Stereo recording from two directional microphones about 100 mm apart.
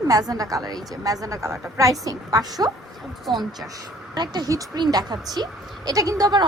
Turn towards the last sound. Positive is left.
turn(degrees=-40)  # may be behind; listen again after turning